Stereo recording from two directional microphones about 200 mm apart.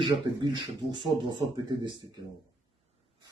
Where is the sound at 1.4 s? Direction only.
20° right (ahead or behind).